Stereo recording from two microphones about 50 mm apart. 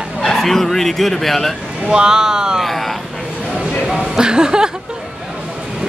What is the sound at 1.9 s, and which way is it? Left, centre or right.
Speech, centre.